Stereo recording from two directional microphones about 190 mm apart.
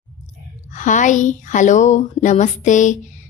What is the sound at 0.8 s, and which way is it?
A woman's voice, 40° left (ahead or behind).